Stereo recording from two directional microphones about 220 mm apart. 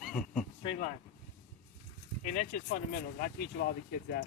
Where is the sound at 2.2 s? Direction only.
35° left (ahead or behind).